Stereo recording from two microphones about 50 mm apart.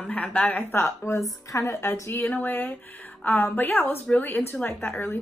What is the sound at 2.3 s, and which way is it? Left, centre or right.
Speech, left.